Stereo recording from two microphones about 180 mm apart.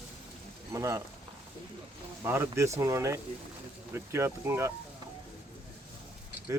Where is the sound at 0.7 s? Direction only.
15° right (ahead or behind).